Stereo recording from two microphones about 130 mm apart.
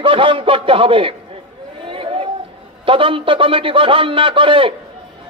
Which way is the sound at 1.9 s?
45° right (ahead or behind).